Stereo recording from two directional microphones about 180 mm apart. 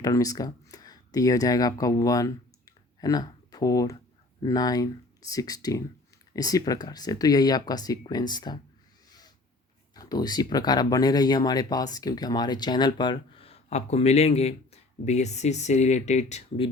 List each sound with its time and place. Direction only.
0.0 s speech: 20° left (ahead or behind)
9.9 s speech: 20° left (ahead or behind); by 16.6 s 40° left (ahead or behind)